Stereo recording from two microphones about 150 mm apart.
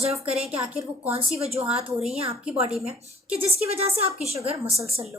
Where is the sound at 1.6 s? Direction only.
5° right (ahead or behind).